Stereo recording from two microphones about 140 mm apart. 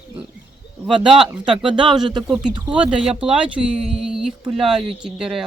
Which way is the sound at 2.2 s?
5° right (ahead or behind).